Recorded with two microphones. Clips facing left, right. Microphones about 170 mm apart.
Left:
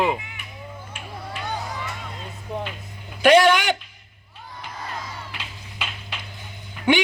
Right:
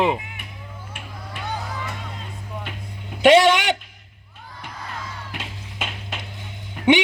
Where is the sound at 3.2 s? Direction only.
25° right (ahead or behind).